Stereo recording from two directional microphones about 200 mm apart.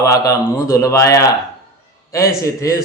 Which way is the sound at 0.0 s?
15° left (ahead or behind).